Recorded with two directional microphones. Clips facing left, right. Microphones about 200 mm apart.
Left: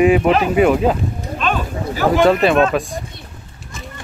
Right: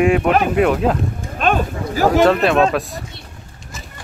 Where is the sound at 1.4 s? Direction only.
50° right (ahead or behind).